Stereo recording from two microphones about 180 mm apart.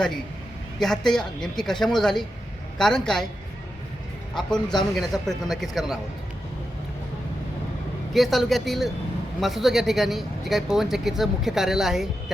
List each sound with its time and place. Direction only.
0.8 s speech: centre (ahead or behind)
4.5 s a man's voice: 25° left (ahead or behind)
4.9 s speech: centre (ahead or behind)
8.1 s speech: centre (ahead or behind)